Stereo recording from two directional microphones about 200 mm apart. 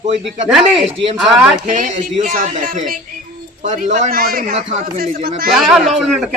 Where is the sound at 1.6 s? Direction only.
40° right (ahead or behind).